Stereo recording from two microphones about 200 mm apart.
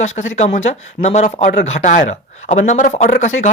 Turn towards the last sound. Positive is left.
turn(degrees=40)  # may be behind; listen again after turning